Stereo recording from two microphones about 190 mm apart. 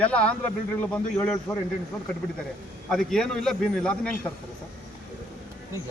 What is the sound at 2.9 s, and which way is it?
A man's voice, 5° left (ahead or behind).